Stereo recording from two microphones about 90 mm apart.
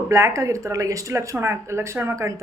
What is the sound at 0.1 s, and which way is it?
A woman's voice, 30° right (ahead or behind).